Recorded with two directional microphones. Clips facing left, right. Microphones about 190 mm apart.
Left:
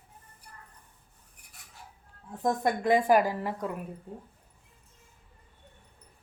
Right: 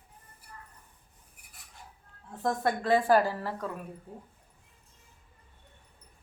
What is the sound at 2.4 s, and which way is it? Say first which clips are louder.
Speech: left 2 dB; 15° left (ahead or behind).